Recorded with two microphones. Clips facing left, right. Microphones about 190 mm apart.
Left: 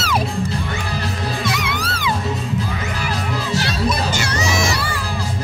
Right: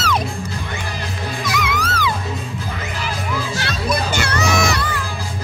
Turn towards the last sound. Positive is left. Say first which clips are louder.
# right 2 dB
turn(degrees=-60)  # may be behind; listen again after turning